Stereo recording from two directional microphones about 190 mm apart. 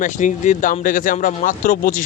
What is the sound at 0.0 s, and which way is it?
A man's voice, 40° left (ahead or behind).